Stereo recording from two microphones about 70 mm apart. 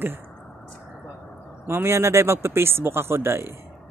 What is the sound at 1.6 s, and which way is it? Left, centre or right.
Speech, right.